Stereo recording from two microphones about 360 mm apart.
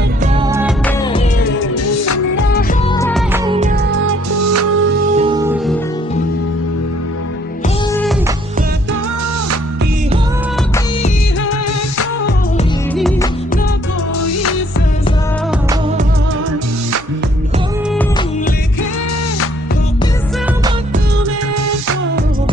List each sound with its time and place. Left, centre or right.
0.2 s music: centre
2.3 s music: left
2.9 s music: centre
3.4 s music: centre
4.1 s music: right
5.1 s music: centre
12.9 s music: centre